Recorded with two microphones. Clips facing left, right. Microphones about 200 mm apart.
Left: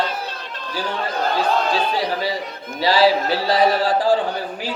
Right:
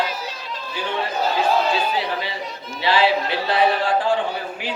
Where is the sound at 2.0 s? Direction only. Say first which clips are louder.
Left 3 dB; 40° left (ahead or behind).